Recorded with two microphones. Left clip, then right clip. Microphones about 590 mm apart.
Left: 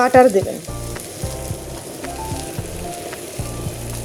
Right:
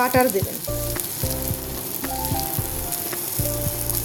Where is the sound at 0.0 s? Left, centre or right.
Right.